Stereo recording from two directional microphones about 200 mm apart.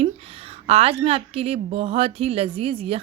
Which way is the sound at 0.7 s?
30° right (ahead or behind).